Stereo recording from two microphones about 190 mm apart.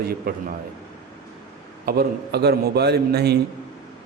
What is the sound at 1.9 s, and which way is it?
A man's voice, 55° right (ahead or behind).